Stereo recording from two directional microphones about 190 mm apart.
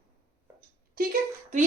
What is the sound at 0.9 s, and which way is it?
Speech, 45° right (ahead or behind).